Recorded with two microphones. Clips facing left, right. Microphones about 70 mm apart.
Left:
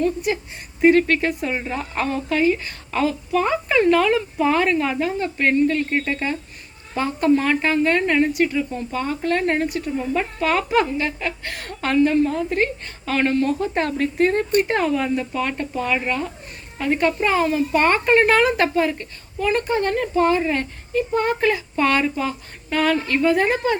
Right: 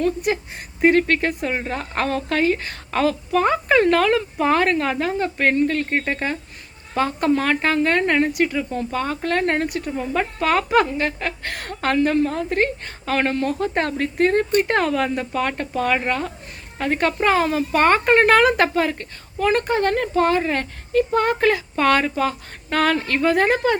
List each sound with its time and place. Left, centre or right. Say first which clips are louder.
0.0 s speech: even; right
0.8 s speech: left 1 dB; right
5.4 s speech: left 2 dB; right
6.9 s speech: left 1 dB; right
8.3 s speech: left 1 dB; right
14.7 s a woman's voice: even; right
17.7 s speech: right 2 dB; right
20.9 s speech: right 2 dB; right